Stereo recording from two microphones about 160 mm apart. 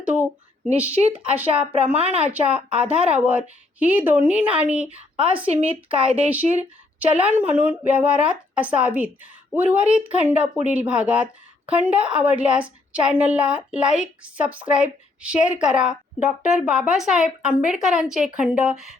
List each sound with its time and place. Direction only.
0.0 s a sound: 10° right (ahead or behind)
0.7 s a woman's voice: 40° right (ahead or behind)
2.3 s a woman's voice: 5° right (ahead or behind)
5.5 s speech: 45° right (ahead or behind)
6.0 s a woman's voice: 5° right (ahead or behind)